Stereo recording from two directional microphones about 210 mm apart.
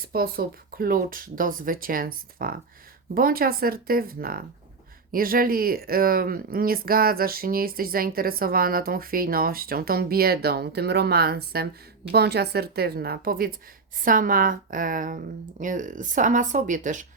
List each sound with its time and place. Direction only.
0.0 s a woman's voice: 45° right (ahead or behind)